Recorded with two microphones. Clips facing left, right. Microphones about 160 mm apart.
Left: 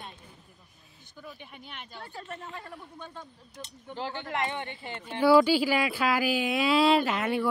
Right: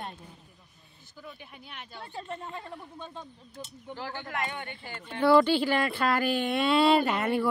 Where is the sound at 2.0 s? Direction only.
20° right (ahead or behind).